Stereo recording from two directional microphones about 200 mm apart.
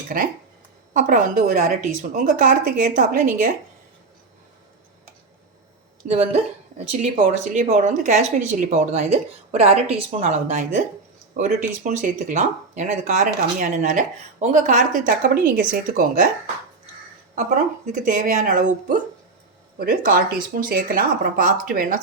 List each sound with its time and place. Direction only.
0.1 s a woman's voice: 45° right (ahead or behind)
6.1 s speech: 35° right (ahead or behind)
17.3 s a woman's voice: 40° right (ahead or behind)